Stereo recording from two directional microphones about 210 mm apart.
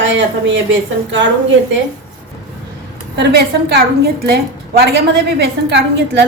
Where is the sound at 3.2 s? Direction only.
50° right (ahead or behind).